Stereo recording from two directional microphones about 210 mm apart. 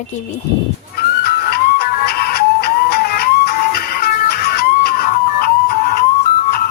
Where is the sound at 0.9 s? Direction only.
45° left (ahead or behind).